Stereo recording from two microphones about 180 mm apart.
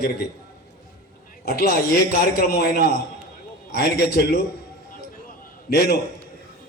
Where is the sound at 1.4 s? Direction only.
60° left (ahead or behind).